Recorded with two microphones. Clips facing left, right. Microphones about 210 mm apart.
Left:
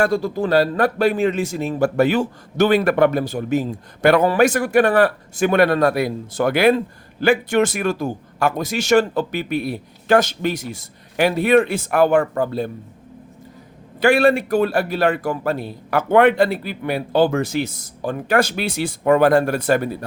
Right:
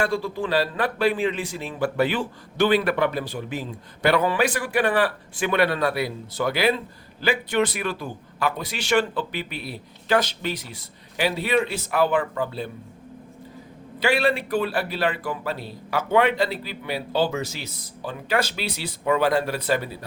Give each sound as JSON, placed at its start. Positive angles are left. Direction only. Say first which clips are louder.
{"t": 0.0, "sound": "speech", "louder": "left 6 dB", "side_deg": 40}
{"t": 14.0, "sound": "speech", "louder": "left 7 dB", "side_deg": 50}